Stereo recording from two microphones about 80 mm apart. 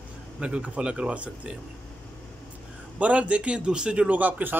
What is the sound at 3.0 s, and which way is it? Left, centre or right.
A man's voice, centre.